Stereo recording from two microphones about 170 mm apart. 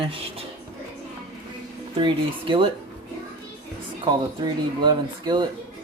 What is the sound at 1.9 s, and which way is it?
Speech, 30° right (ahead or behind).